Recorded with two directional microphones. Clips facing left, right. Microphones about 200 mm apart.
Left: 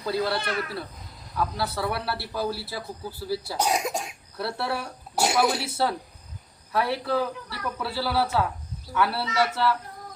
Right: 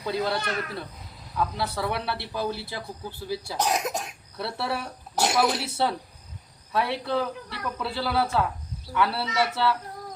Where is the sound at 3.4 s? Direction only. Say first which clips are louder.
Even; 10° left (ahead or behind).